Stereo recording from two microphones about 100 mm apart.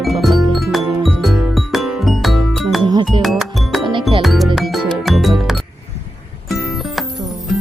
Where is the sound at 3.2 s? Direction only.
Centre (ahead or behind).